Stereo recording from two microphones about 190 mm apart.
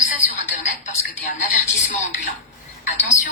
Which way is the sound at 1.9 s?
40° left (ahead or behind).